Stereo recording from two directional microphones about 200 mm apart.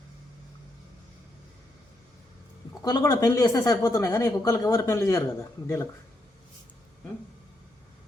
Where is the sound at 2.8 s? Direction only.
20° left (ahead or behind).